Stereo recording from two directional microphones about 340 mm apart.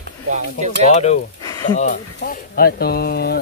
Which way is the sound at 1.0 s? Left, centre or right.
Centre.